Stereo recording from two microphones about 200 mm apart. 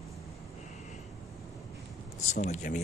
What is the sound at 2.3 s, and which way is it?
Speech, 35° left (ahead or behind).